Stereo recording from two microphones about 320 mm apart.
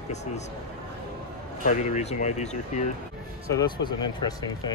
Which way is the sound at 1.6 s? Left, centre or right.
Left.